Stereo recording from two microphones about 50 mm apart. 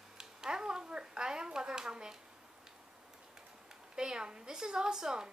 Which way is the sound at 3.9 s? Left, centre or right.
Centre.